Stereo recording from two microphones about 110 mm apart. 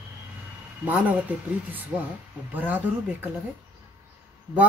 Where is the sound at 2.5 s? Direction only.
15° right (ahead or behind).